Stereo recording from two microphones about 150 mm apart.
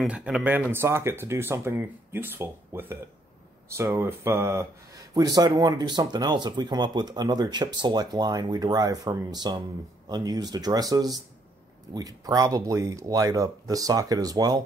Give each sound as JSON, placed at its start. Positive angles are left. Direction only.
{"t": 0.0, "sound": "speech", "side_deg": -5}